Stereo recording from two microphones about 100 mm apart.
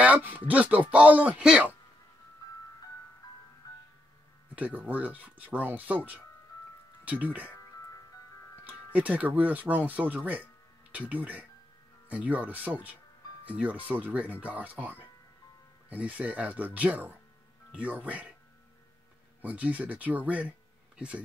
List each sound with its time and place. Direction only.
0.0 s speech: 15° right (ahead or behind)
4.6 s speech: 15° right (ahead or behind)
8.6 s speech: 15° right (ahead or behind)
19.4 s speech: 15° right (ahead or behind)